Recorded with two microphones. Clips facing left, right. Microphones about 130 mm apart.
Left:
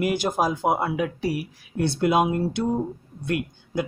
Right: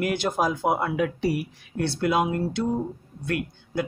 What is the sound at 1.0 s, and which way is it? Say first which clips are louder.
Speech: right 1 dB; centre (ahead or behind).